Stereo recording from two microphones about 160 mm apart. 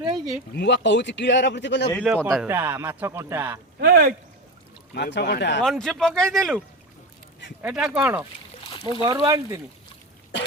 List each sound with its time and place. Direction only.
0.0 s speech: 25° right (ahead or behind)
0.5 s speech: 90° left
2.5 s speech: 15° right (ahead or behind)
3.8 s speech: 75° right (ahead or behind)
4.9 s speech: 90° left
5.6 s speech: centre (ahead or behind)
7.6 s speech: 5° right (ahead or behind)
8.0 s speech: 15° right (ahead or behind)
8.6 s a sound: 30° left (ahead or behind)
9.0 s speech: 20° right (ahead or behind)